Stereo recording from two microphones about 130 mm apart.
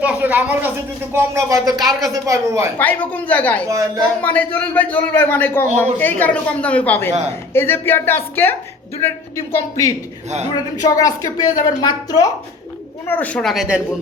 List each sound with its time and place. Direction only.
0.0 s speech: 15° right (ahead or behind)
2.7 s a man's voice: 15° left (ahead or behind)
3.7 s speech: 25° right (ahead or behind)
4.2 s a man's voice: 15° left (ahead or behind)
10.2 s a man's voice: 60° right (ahead or behind)
10.5 s speech: 30° left (ahead or behind)
13.1 s a man's voice: 15° left (ahead or behind)
13.5 s speech: 5° right (ahead or behind)